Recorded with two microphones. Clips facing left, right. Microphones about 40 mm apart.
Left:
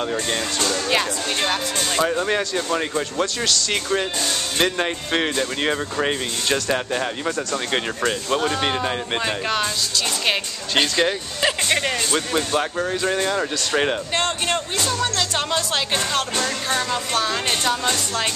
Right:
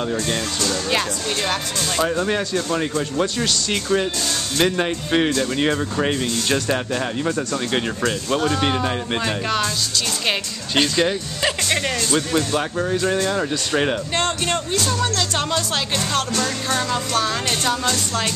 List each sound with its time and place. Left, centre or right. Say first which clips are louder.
0.8 s speech: even; centre
1.8 s speech: even; centre
2.0 s speech: even; centre